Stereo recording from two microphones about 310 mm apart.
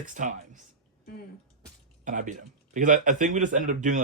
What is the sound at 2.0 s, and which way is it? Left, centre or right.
Speech, right.